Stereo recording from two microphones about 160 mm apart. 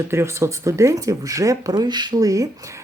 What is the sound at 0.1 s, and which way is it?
Speech, 15° right (ahead or behind).